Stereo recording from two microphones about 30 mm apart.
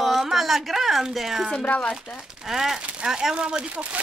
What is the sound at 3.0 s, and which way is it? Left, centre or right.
Speech, right.